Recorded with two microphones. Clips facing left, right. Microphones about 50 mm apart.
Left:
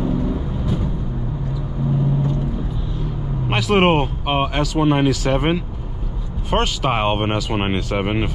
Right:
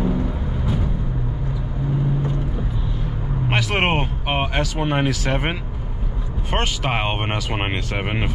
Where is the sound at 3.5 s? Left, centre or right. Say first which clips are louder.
Left 5 dB; centre.